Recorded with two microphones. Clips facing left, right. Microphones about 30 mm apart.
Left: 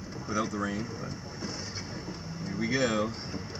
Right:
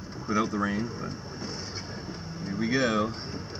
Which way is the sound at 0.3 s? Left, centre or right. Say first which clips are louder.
Right 4 dB; centre.